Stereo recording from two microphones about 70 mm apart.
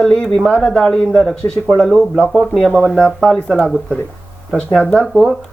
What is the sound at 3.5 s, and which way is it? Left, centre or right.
Speech, centre.